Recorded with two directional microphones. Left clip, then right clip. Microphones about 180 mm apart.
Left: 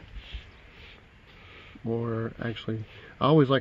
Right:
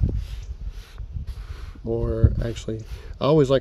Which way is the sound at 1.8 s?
20° right (ahead or behind).